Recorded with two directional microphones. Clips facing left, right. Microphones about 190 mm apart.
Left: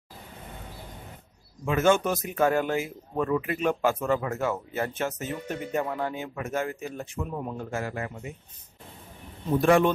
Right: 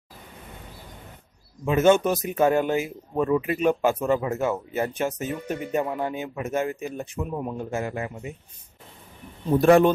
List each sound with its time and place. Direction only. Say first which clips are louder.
1.7 s speech: right 4 dB; 20° right (ahead or behind)
9.6 s speech: right 4 dB; 40° right (ahead or behind)